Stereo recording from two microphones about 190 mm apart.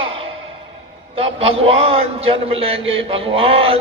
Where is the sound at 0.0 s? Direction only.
30° right (ahead or behind).